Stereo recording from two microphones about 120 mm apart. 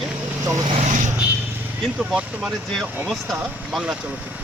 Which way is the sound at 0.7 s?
80° right.